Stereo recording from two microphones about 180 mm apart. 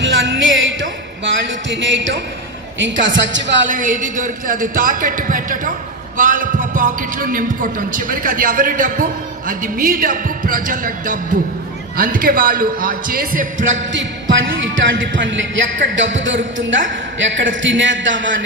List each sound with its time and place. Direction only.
0.0 s music: 90° right
2.7 s a man's voice: 90° right
3.7 s speech: 45° right (ahead or behind)
13.7 s a man's voice: 90° right